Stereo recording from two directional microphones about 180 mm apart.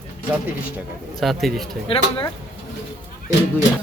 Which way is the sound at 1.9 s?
30° left (ahead or behind).